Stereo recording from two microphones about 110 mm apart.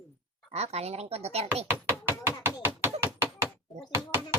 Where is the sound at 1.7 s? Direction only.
20° right (ahead or behind).